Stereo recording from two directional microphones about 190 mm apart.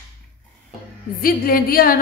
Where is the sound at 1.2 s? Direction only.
50° left (ahead or behind).